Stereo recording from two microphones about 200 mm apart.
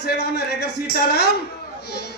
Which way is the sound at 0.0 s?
55° left (ahead or behind).